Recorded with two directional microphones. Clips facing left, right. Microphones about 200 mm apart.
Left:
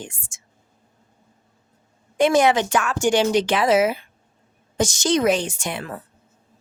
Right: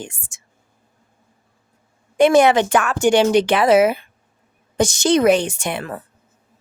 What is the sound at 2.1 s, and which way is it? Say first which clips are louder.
Speech: right 4 dB; 60° right (ahead or behind).